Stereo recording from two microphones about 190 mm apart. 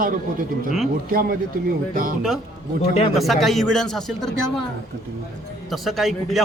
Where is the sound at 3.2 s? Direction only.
Centre (ahead or behind).